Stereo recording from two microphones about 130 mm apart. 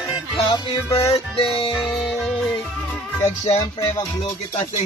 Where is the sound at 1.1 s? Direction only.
45° left (ahead or behind).